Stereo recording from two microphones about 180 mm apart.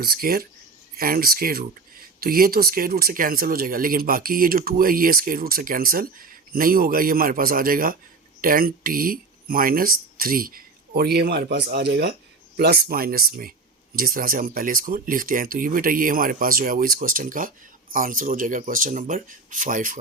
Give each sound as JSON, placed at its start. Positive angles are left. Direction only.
{"t": 0.0, "sound": "speech", "side_deg": -55}